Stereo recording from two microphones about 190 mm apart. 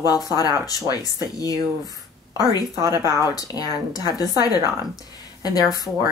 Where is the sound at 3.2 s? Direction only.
20° left (ahead or behind).